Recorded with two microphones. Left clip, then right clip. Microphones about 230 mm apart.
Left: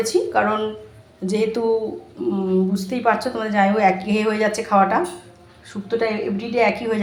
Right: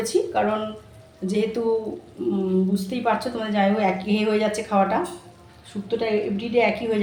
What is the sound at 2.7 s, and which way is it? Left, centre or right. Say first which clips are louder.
A woman's voice: left 4 dB; centre.